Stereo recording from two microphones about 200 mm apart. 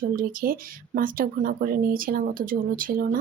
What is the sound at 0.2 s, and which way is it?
Speech, 45° right (ahead or behind).